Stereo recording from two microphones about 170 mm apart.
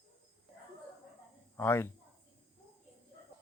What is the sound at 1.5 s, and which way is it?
Speech, 15° left (ahead or behind).